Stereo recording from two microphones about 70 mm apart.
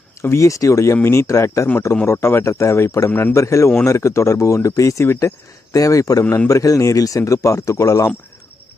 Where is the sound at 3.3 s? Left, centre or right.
Left.